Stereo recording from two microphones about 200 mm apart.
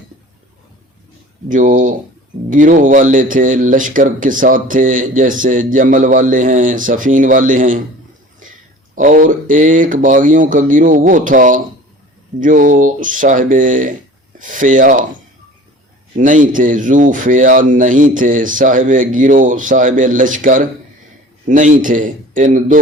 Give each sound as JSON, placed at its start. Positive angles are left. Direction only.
{"t": 1.5, "sound": "a man's voice", "side_deg": -40}
{"t": 9.0, "sound": "a man's voice", "side_deg": -40}
{"t": 16.1, "sound": "a man's voice", "side_deg": -40}